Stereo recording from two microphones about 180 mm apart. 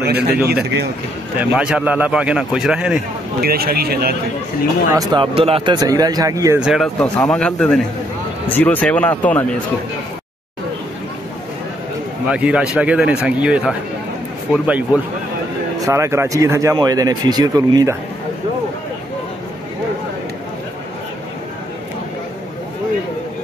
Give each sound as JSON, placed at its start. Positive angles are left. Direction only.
{"t": 0.0, "sound": "a man's voice", "side_deg": -60}
{"t": 1.3, "sound": "a man's voice", "side_deg": -5}
{"t": 3.3, "sound": "a man's voice", "side_deg": -55}
{"t": 4.9, "sound": "speech", "side_deg": -25}
{"t": 6.6, "sound": "a man's voice", "side_deg": 0}
{"t": 12.3, "sound": "a man's voice", "side_deg": -5}